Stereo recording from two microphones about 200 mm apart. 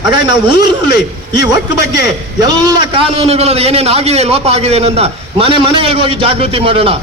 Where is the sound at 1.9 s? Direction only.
20° right (ahead or behind).